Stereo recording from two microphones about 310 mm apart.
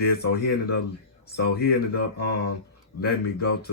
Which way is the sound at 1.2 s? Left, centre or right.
Left.